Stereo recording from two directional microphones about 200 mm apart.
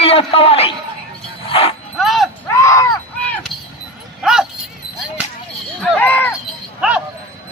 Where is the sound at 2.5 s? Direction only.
15° left (ahead or behind); by 4.4 s 5° right (ahead or behind).